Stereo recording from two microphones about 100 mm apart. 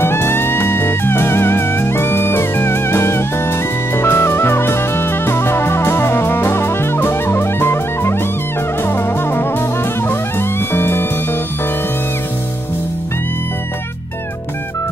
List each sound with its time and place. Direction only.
0.0 s music: 25° left (ahead or behind)